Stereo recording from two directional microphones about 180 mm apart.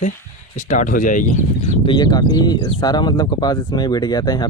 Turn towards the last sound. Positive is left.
turn(degrees=20)  # may be behind; listen again after turning